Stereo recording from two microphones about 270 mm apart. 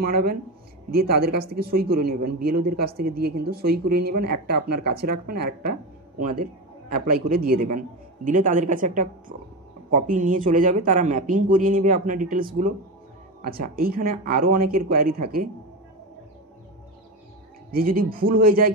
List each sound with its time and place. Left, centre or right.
0.0 s speech: right
17.6 s speech: right